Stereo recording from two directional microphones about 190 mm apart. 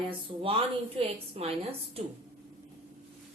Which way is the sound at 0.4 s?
30° right (ahead or behind).